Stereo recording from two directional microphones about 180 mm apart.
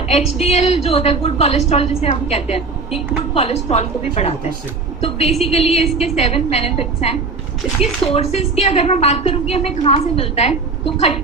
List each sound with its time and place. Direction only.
0.1 s a woman's voice: 35° left (ahead or behind)